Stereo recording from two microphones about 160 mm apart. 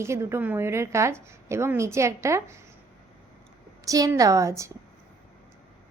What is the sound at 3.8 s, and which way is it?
Speech, 20° right (ahead or behind).